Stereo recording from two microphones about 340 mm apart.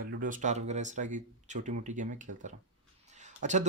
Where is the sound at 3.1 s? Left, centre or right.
Right.